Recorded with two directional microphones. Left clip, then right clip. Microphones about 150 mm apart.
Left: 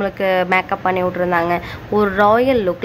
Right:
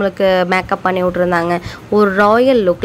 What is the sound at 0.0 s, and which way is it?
A woman's voice, 35° right (ahead or behind).